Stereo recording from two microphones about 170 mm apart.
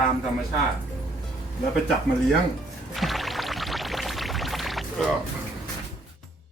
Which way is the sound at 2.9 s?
Centre (ahead or behind).